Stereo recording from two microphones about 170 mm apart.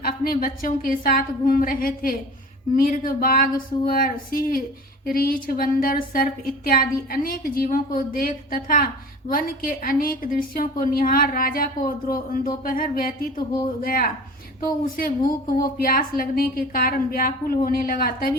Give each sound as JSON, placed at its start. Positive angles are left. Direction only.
{"t": 0.0, "sound": "a woman's voice", "side_deg": 55}